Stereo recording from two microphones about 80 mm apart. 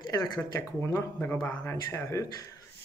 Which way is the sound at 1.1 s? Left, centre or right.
Centre.